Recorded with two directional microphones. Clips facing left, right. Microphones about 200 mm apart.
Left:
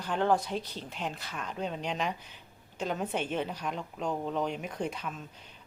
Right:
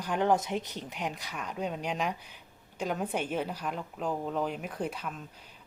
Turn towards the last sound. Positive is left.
turn(degrees=-5)  # may be behind; listen again after turning